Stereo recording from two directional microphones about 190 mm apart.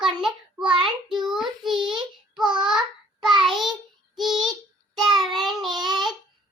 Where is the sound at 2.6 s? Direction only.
5° right (ahead or behind).